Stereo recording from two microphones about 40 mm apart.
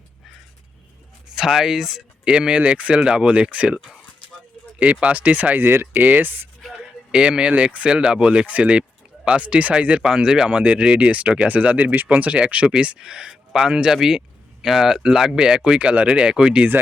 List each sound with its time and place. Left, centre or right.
1.4 s speech: centre
2.2 s speech: right
2.6 s speech: right
4.8 s speech: right
5.5 s speech: right
6.8 s speech: right
10.0 s speech: centre
12.7 s speech: centre
15.8 s speech: right